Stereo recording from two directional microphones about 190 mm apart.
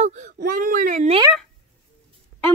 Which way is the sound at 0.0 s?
40° right (ahead or behind).